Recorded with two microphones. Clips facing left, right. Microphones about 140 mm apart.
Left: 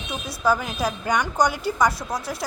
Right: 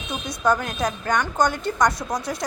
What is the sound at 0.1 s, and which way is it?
A woman's voice, 5° left (ahead or behind).